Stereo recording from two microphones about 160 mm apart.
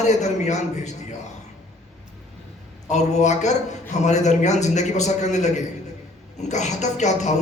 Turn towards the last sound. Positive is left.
turn(degrees=45)  # may be behind; listen again after turning